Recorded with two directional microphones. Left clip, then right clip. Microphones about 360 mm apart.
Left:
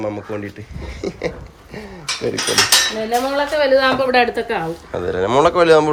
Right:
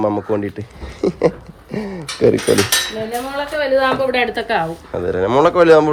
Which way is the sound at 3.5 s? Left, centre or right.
Left.